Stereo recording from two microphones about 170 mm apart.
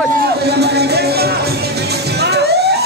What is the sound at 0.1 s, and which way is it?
Music, 70° right (ahead or behind).